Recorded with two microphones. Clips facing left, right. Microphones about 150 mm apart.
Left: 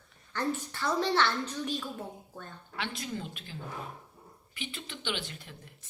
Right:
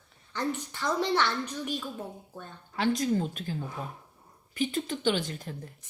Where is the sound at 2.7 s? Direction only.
40° right (ahead or behind).